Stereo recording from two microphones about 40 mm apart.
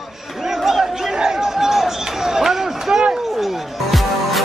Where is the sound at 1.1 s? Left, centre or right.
Centre.